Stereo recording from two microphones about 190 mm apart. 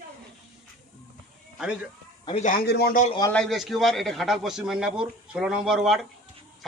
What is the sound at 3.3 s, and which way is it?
A man's voice, centre (ahead or behind).